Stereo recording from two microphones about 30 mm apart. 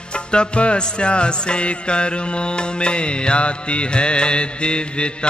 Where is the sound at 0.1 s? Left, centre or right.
Left.